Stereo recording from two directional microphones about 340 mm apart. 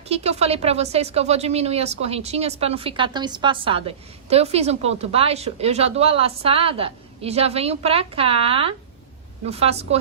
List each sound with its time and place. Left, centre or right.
0.1 s speech: centre